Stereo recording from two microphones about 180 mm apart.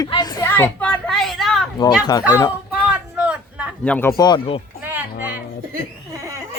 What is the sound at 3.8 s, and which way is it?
Speech, 10° left (ahead or behind).